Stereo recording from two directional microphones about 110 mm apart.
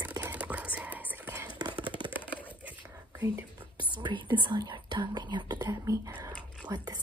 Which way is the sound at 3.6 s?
45° right (ahead or behind).